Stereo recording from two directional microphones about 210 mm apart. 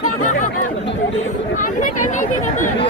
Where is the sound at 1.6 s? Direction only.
35° left (ahead or behind).